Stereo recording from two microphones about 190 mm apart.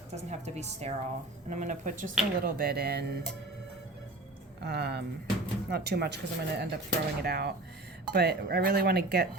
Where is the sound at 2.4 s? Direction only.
55° right (ahead or behind).